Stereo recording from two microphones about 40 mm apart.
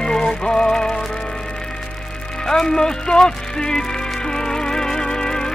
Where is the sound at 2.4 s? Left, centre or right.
Centre.